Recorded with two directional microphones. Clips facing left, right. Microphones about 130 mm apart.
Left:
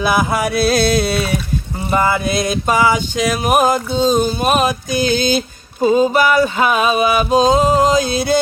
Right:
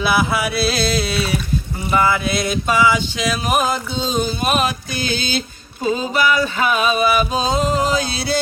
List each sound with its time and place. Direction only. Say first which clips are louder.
0.0 s music: left 2 dB; 45° left (ahead or behind)
5.8 s music: left 6 dB; 45° left (ahead or behind)